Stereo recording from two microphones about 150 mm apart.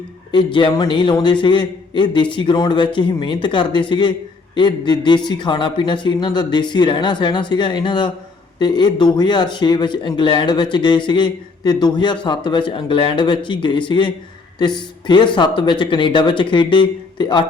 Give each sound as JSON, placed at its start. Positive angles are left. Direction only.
{"t": 0.3, "sound": "speech", "side_deg": 30}